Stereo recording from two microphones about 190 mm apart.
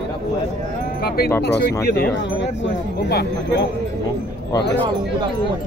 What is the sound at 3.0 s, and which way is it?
Speech, 60° left (ahead or behind).